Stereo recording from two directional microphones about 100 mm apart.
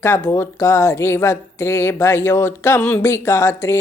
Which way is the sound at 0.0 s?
25° left (ahead or behind).